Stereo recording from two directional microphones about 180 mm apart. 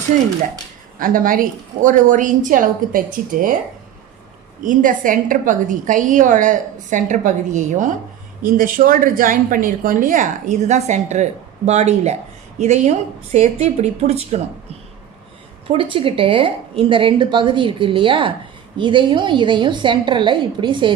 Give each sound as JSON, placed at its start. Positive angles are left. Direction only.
{"t": 0.9, "sound": "a woman's voice", "side_deg": -50}
{"t": 4.6, "sound": "a woman's voice", "side_deg": -45}